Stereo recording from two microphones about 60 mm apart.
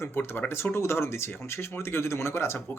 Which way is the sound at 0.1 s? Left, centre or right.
Left.